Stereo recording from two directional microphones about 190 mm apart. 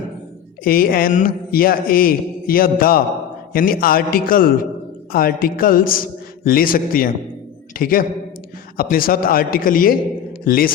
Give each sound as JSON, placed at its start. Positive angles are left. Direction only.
{"t": 0.6, "sound": "a man's voice", "side_deg": 50}